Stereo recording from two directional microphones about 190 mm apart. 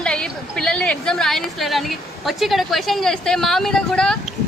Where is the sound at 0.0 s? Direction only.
5° left (ahead or behind).